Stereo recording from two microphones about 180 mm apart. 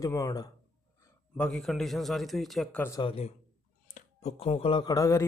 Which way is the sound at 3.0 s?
35° left (ahead or behind).